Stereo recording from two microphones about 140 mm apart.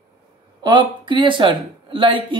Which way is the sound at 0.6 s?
35° right (ahead or behind).